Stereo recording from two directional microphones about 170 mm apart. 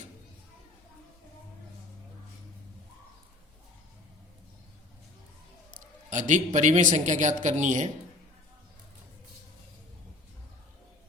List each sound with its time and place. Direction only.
5.7 s a man's voice: 45° right (ahead or behind)